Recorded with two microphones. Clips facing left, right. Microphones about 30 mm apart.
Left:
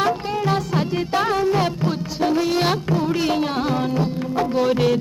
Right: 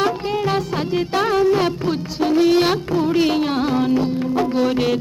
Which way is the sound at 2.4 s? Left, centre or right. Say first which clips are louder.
Right 6 dB; centre.